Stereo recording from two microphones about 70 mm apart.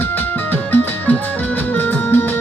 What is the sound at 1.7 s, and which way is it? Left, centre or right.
Music, left.